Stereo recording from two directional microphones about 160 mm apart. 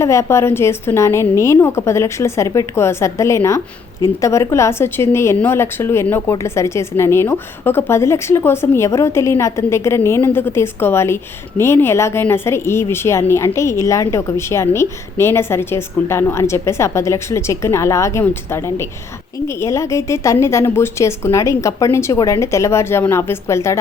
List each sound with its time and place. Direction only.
0.0 s a woman's voice: 20° left (ahead or behind)